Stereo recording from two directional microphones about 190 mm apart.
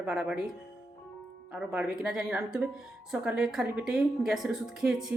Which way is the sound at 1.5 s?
5° right (ahead or behind).